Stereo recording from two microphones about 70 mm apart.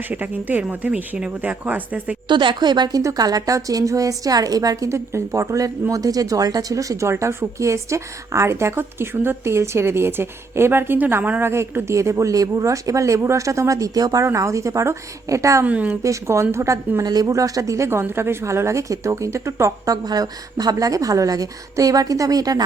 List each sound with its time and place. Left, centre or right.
0.1 s speech: right
2.2 s a woman's voice: right
3.0 s a woman's voice: right
14.3 s speech: right
15.6 s speech: right
16.0 s speech: right
17.0 s a woman's voice: right
17.3 s a woman's voice: right